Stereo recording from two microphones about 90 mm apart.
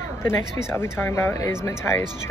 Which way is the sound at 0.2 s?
30° left (ahead or behind).